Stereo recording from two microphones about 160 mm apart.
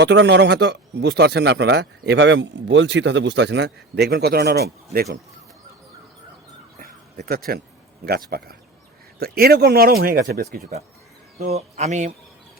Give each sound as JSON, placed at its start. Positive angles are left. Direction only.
{"t": 0.0, "sound": "speech", "side_deg": -90}
{"t": 6.7, "sound": "keys jangling", "side_deg": -65}
{"t": 8.0, "sound": "speech", "side_deg": -70}
{"t": 11.3, "sound": "speech", "side_deg": -40}